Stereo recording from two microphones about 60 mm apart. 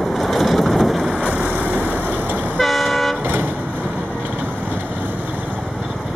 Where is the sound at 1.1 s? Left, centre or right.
Right.